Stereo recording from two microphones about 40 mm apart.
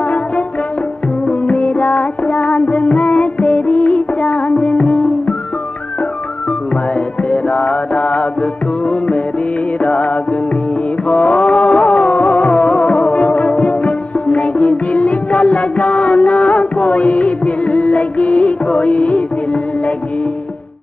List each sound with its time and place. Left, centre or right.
1.5 s music: left
7.2 s music: left